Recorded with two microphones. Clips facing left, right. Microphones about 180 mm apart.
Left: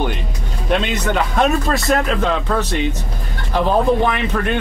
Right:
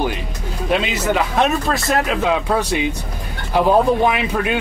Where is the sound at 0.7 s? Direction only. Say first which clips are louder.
Even; 5° right (ahead or behind).